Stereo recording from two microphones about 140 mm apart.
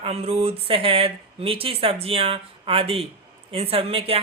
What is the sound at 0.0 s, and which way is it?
Speech, 45° right (ahead or behind).